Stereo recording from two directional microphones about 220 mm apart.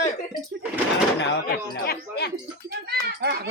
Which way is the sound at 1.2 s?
50° left (ahead or behind).